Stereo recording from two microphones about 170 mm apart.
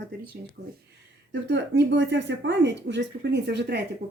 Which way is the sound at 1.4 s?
90° right.